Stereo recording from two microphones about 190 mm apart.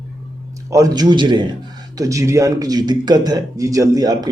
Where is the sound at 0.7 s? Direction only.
20° right (ahead or behind).